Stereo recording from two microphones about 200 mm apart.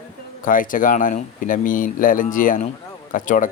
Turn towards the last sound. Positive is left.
turn(degrees=40)  # may be behind; listen again after turning